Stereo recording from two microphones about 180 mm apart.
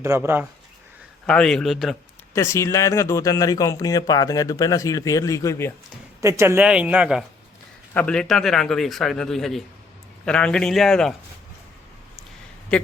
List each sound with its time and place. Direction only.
0.0 s speech: 15° right (ahead or behind)
1.3 s a man's voice: 5° left (ahead or behind)
2.3 s speech: 15° left (ahead or behind)
6.2 s speech: 15° right (ahead or behind)
7.9 s a man's voice: 5° left (ahead or behind)
12.7 s speech: 5° left (ahead or behind)